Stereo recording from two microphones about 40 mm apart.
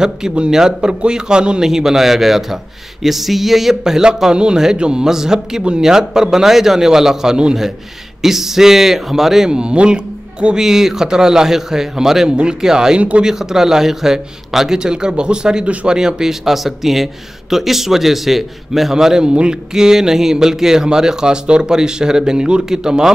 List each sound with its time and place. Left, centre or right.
0.0 s a man's voice: right
9.5 s speech: right
10.6 s speech: centre
12.3 s speech: right
12.9 s speech: right
13.2 s a man's voice: centre